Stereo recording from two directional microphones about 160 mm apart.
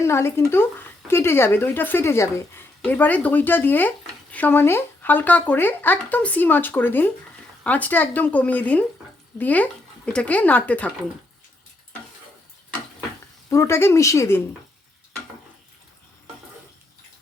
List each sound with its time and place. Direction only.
0.0 s speech: 15° left (ahead or behind)
13.5 s speech: 15° left (ahead or behind)